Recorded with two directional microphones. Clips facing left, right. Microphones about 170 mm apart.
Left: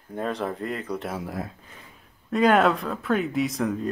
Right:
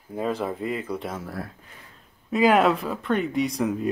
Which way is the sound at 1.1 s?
15° left (ahead or behind).